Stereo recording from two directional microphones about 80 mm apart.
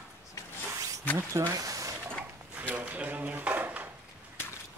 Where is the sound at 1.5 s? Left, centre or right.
Right.